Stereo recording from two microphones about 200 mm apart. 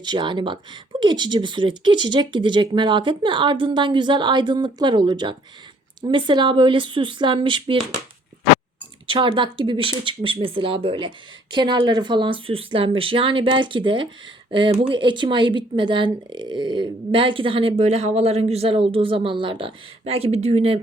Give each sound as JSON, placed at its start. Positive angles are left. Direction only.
{"t": 0.0, "sound": "speech", "side_deg": -25}
{"t": 9.0, "sound": "speech", "side_deg": -25}